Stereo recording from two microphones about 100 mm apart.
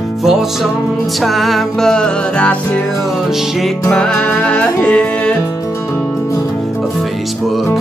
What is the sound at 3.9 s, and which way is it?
Music, 10° left (ahead or behind).